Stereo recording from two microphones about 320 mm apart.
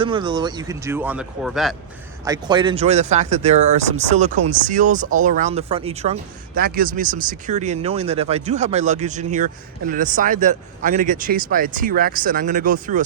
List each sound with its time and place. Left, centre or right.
0.0 s speech: centre
2.2 s speech: centre